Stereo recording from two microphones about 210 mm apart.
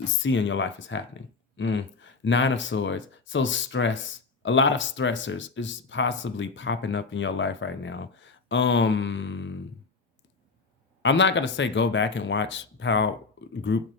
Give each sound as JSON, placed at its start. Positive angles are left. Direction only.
{"t": 0.0, "sound": "speech", "side_deg": 60}
{"t": 11.0, "sound": "speech", "side_deg": 60}